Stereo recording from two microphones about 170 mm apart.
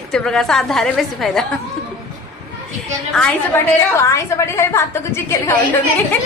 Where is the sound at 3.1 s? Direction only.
5° left (ahead or behind).